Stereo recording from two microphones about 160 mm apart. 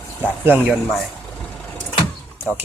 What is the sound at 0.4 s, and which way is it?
Speech, 5° right (ahead or behind).